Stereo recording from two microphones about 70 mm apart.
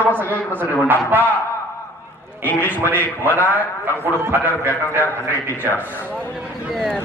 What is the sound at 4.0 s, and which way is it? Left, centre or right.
Speech, right.